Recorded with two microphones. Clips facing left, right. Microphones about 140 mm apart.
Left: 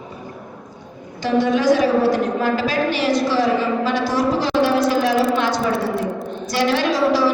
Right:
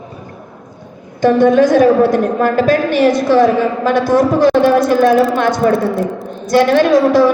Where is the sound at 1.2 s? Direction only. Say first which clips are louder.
Right 9 dB; 50° right (ahead or behind).